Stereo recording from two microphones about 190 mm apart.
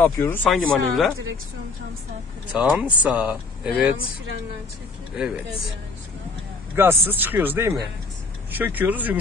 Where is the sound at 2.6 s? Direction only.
5° right (ahead or behind).